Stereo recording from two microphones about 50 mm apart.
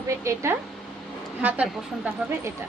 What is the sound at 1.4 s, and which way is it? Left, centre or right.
Speech, right.